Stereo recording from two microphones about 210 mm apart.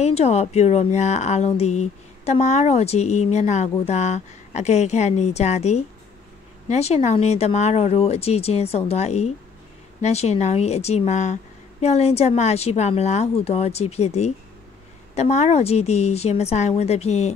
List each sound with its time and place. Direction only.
0.0 s speech: 30° left (ahead or behind)